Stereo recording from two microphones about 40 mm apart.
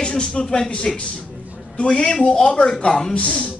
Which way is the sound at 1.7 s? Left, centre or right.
Left.